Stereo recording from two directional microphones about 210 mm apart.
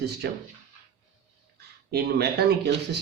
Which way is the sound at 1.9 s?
50° right (ahead or behind).